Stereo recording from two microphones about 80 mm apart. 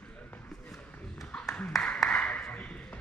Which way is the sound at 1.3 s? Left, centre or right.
Centre.